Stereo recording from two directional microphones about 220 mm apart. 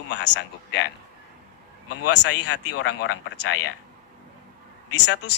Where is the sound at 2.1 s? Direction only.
55° left (ahead or behind).